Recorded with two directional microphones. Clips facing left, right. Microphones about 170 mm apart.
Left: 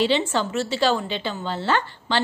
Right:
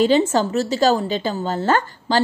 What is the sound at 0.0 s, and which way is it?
A woman's voice, 40° right (ahead or behind).